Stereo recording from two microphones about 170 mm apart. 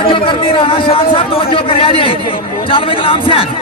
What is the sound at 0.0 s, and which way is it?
Speech, 30° left (ahead or behind).